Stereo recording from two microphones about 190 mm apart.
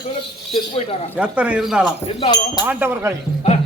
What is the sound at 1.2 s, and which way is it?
Speech, 5° right (ahead or behind).